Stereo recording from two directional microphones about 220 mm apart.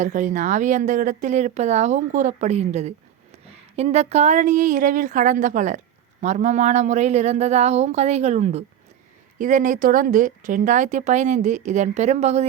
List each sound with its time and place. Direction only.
0.0 s speech: 35° right (ahead or behind)